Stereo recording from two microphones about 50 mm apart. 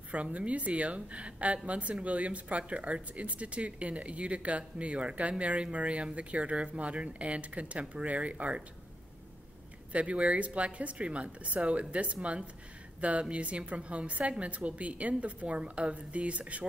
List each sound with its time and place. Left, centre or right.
0.1 s speech: right
9.9 s speech: right